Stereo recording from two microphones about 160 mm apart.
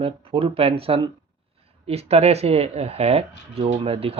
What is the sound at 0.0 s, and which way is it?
Speech, 35° right (ahead or behind).